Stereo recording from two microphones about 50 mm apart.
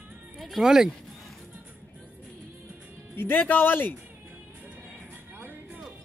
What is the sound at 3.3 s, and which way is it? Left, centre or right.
Speech, left.